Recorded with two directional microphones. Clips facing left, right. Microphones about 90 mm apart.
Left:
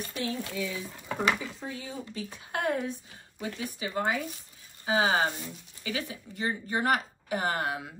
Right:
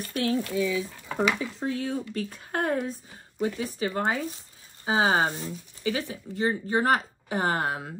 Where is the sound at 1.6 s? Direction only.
90° right.